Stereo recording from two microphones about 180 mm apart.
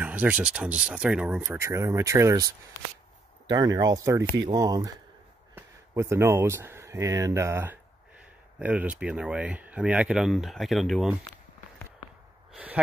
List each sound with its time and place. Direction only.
0.0 s speech: 10° right (ahead or behind)